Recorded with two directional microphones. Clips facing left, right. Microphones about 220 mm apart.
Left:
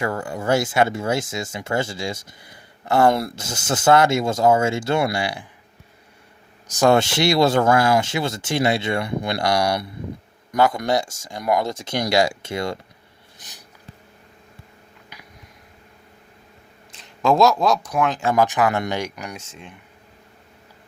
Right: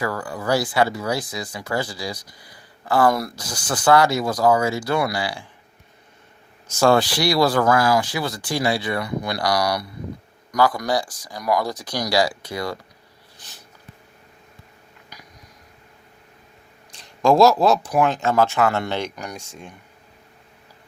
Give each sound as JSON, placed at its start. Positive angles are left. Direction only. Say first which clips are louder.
{"t": 0.0, "sound": "speech", "louder": "left 1 dB", "side_deg": 25}
{"t": 6.7, "sound": "speech", "louder": "left 1 dB", "side_deg": 20}
{"t": 17.0, "sound": "a sound", "louder": "right 2 dB", "side_deg": 0}
{"t": 17.6, "sound": "speech", "louder": "right 2 dB", "side_deg": -5}
{"t": 18.2, "sound": "speech", "louder": "even", "side_deg": 15}